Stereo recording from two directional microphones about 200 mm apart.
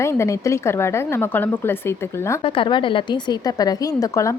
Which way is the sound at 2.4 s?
25° left (ahead or behind).